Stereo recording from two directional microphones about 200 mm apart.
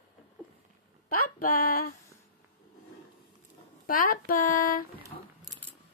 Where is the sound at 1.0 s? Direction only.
45° left (ahead or behind).